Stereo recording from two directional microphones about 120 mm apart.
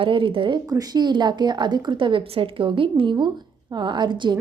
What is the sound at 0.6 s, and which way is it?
A woman's voice, 30° right (ahead or behind).